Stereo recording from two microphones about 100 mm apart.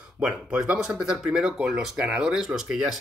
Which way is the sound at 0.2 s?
10° right (ahead or behind).